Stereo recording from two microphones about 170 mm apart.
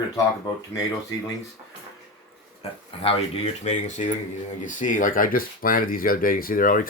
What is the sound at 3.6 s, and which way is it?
Speech, 45° left (ahead or behind).